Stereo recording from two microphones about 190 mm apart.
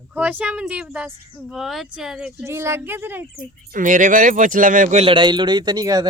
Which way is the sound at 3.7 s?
45° right (ahead or behind).